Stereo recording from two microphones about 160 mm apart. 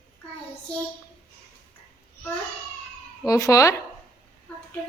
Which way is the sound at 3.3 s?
20° left (ahead or behind).